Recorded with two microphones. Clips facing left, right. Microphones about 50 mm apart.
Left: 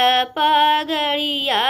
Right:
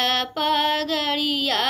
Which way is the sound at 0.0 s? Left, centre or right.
Left.